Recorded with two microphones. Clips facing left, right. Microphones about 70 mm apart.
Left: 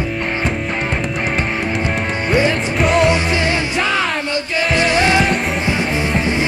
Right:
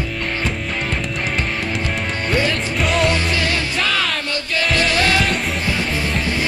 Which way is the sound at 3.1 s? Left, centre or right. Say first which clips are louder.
Left 3 dB; left.